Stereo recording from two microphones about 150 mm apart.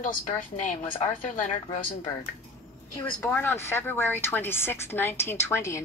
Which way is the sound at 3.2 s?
15° left (ahead or behind).